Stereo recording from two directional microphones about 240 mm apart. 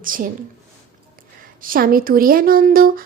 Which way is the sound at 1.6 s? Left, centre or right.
Right.